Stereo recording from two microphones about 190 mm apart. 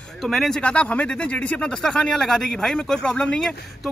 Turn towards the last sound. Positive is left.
turn(degrees=5)  # may be behind; listen again after turning